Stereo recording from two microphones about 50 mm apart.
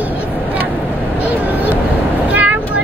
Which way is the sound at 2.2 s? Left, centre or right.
Right.